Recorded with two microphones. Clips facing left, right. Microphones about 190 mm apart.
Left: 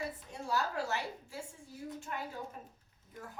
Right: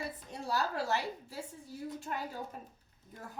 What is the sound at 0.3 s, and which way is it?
A woman's voice, 35° right (ahead or behind).